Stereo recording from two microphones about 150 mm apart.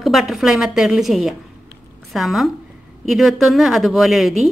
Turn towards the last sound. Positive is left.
turn(degrees=0)  # may be behind; listen again after turning